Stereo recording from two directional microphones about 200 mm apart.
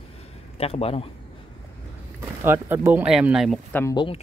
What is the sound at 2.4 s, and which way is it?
Speech, 10° right (ahead or behind).